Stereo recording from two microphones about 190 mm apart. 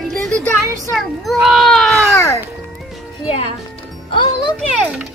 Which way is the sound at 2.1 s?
15° left (ahead or behind).